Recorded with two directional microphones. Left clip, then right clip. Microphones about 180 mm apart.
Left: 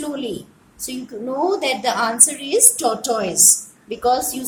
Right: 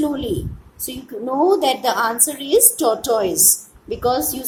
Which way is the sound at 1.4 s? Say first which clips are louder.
Right 3 dB; 15° right (ahead or behind).